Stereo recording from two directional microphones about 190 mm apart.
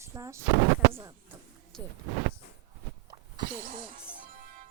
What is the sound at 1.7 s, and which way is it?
Speech, 5° left (ahead or behind).